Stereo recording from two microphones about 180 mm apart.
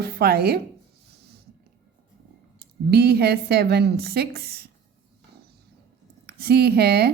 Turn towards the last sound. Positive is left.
turn(degrees=-65)  # may be behind; listen again after turning